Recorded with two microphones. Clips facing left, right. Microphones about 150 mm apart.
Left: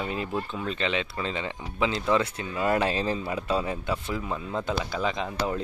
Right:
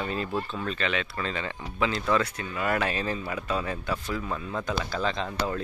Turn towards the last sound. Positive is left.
turn(degrees=15)  # may be behind; listen again after turning